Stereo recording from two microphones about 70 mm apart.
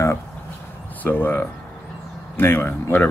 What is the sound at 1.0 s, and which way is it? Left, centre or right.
Speech, left.